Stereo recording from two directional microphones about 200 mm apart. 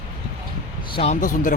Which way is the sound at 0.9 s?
30° left (ahead or behind).